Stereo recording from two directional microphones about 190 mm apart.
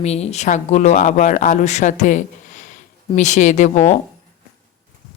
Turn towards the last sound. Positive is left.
turn(degrees=40)  # may be behind; listen again after turning